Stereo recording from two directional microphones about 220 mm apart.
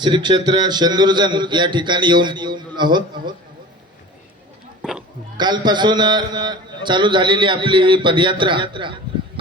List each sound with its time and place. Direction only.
0.0 s a man's voice: 20° right (ahead or behind)
4.8 s a sound: 5° right (ahead or behind)
5.4 s a man's voice: 20° right (ahead or behind)